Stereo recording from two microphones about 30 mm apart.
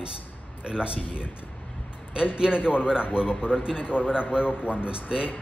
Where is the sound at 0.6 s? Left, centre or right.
Right.